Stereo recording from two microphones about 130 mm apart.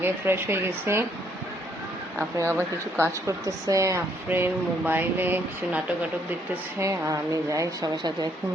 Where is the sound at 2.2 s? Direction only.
20° right (ahead or behind).